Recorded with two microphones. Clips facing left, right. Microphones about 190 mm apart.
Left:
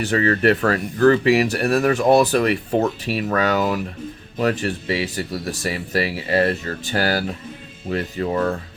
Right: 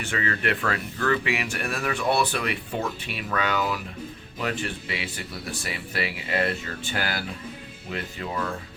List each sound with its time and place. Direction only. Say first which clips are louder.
0.0 s speech: left 10 dB; 40° left (ahead or behind)